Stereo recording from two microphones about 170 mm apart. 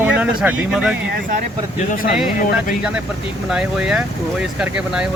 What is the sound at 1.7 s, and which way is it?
Speech, 55° left (ahead or behind).